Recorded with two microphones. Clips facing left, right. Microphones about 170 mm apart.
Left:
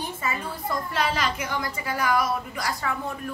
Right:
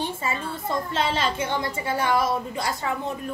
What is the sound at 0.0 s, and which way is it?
A woman's voice, 30° right (ahead or behind).